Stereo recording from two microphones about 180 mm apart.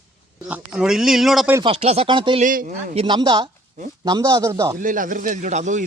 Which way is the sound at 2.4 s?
45° right (ahead or behind).